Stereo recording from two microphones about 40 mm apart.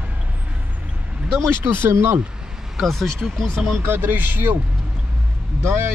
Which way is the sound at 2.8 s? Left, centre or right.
Centre.